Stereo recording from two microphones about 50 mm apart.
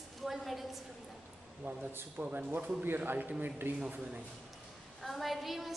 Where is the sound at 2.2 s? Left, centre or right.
Right.